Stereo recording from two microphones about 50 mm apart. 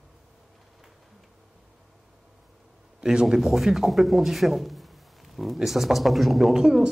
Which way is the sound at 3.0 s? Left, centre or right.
Centre.